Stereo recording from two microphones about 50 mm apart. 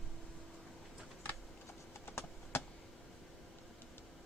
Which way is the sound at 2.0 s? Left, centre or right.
Left.